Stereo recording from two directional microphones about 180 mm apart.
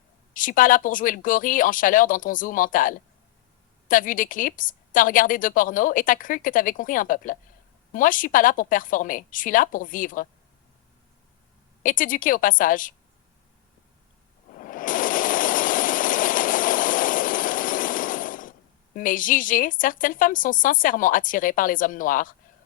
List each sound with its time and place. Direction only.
0.3 s a woman's voice: 50° left (ahead or behind)
11.8 s a woman's voice: 50° left (ahead or behind)
14.6 s a sound: 50° left (ahead or behind)
18.9 s a woman's voice: 50° left (ahead or behind)